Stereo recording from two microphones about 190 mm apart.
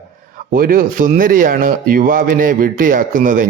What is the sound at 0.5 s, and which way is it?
Speech, 50° right (ahead or behind).